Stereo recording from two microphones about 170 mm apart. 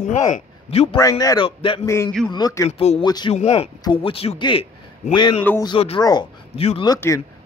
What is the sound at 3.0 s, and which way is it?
Speech, 25° left (ahead or behind).